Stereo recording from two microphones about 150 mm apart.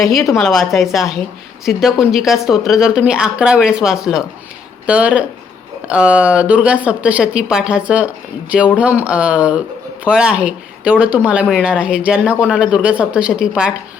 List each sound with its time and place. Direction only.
0.3 s a woman's voice: 5° left (ahead or behind)